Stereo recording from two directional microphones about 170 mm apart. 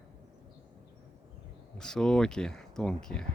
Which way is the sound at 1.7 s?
5° left (ahead or behind).